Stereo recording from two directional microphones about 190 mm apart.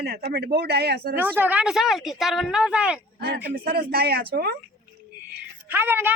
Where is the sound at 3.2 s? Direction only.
55° right (ahead or behind).